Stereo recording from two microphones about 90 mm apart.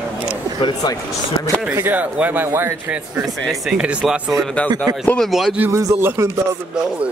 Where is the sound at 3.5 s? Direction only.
5° right (ahead or behind).